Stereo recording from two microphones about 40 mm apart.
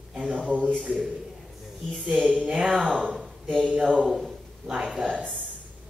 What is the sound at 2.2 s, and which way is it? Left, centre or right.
Speech, right.